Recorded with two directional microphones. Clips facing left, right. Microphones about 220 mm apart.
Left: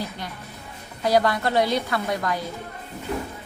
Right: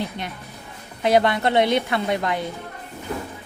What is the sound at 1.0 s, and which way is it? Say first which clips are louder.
A woman's voice: right 2 dB; 25° right (ahead or behind).